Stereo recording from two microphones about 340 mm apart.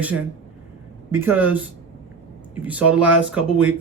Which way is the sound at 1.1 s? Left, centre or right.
Centre.